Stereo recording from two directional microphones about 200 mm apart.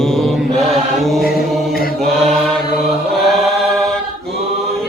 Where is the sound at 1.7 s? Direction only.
50° left (ahead or behind).